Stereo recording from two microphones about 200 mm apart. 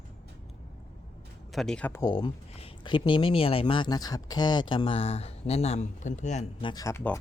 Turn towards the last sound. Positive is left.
turn(degrees=15)  # may be behind; listen again after turning